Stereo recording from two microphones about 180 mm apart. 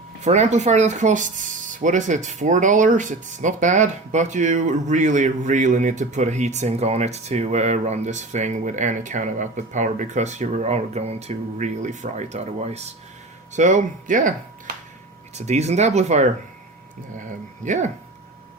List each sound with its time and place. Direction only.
0.2 s speech: 40° right (ahead or behind)
15.4 s speech: 40° right (ahead or behind)
17.7 s speech: 40° right (ahead or behind)